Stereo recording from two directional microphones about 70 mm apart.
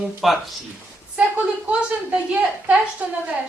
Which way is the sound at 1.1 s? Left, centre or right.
Centre.